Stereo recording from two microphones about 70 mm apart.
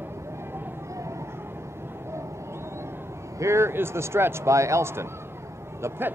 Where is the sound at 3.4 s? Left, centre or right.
Right.